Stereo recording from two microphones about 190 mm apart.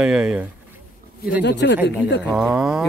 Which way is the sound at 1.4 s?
65° left (ahead or behind).